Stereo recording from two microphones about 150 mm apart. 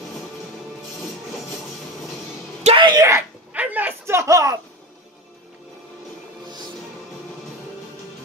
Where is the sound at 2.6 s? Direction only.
40° right (ahead or behind).